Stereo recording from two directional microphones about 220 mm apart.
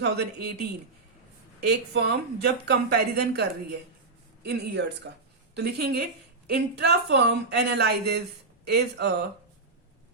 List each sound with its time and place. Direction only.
0.0 s speech: 45° right (ahead or behind)
1.6 s speech: 45° right (ahead or behind)